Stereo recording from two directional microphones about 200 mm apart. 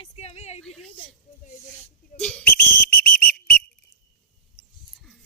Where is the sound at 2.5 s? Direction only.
50° left (ahead or behind).